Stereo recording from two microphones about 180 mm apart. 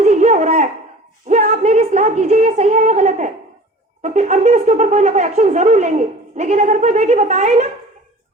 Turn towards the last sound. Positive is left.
turn(degrees=-40)  # may be behind; listen again after turning